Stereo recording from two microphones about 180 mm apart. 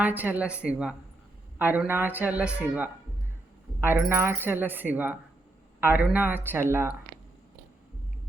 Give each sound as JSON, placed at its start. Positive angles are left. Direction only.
{"t": 0.0, "sound": "speech", "side_deg": -10}